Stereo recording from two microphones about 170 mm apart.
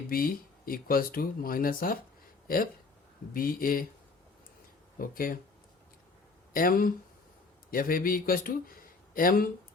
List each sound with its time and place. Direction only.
0.1 s speech: 60° left (ahead or behind)
3.3 s speech: 55° left (ahead or behind)
4.9 s speech: 55° left (ahead or behind)
6.5 s speech: 55° left (ahead or behind)